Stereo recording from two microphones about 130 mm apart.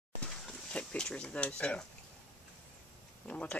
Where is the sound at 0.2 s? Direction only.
5° left (ahead or behind).